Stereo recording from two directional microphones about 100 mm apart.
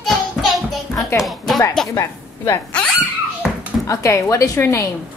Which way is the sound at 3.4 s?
5° right (ahead or behind).